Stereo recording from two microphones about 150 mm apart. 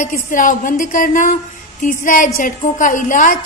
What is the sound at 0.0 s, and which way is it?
A woman's voice, 60° left (ahead or behind).